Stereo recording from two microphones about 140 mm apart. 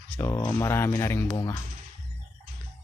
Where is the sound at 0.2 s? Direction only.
20° left (ahead or behind).